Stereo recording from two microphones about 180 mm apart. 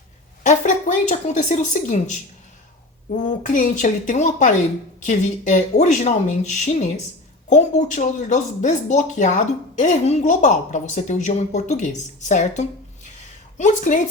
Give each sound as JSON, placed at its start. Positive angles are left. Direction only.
{"t": 0.4, "sound": "speech", "side_deg": 45}
{"t": 3.4, "sound": "a woman's voice", "side_deg": 45}